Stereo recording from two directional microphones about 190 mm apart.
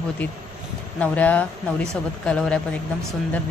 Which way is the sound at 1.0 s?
10° left (ahead or behind).